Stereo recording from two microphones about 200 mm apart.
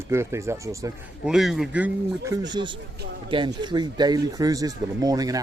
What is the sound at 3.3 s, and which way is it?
Speech, 25° right (ahead or behind).